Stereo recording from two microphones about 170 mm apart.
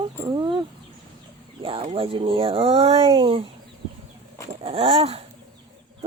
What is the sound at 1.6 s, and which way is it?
Speech, 35° right (ahead or behind).